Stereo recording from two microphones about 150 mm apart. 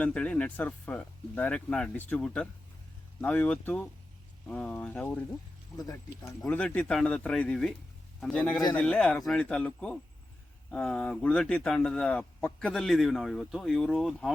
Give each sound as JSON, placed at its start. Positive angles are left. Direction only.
{"t": 0.0, "sound": "speech", "side_deg": 10}
{"t": 5.7, "sound": "speech", "side_deg": 25}
{"t": 6.4, "sound": "speech", "side_deg": 10}